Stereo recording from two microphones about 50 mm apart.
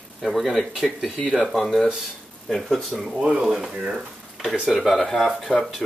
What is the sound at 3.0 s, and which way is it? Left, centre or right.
Speech, centre.